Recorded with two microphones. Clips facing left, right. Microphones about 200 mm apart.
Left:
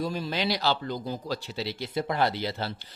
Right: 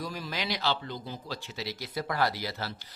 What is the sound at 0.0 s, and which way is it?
Speech, 30° left (ahead or behind).